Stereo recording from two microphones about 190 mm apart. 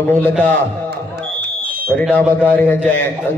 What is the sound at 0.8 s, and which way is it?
Smoke detector, 55° right (ahead or behind).